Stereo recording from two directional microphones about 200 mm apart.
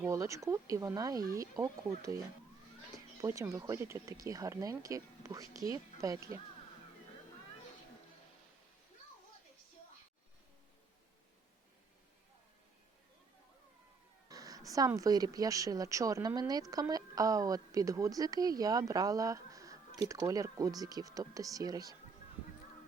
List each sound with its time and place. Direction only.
0.0 s speech: 15° right (ahead or behind)
14.3 s speech: 15° right (ahead or behind)